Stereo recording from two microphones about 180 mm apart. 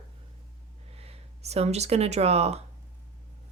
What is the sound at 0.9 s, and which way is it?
Speech, 35° right (ahead or behind).